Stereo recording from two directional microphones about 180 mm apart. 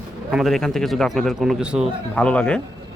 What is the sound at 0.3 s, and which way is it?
A man's voice, centre (ahead or behind).